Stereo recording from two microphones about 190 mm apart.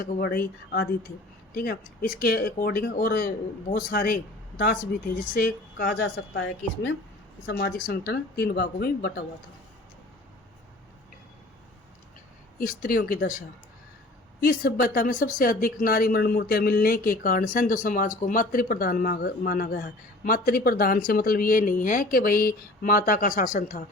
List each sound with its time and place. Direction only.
0.0 s speech: 55° left (ahead or behind); by 6.9 s 75° left (ahead or behind)
7.4 s speech: 55° left (ahead or behind)
12.5 s speech: 50° left (ahead or behind)
14.4 s speech: 50° left (ahead or behind)